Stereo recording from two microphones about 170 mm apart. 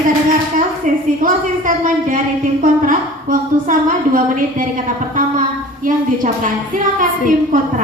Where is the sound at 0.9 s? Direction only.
50° right (ahead or behind).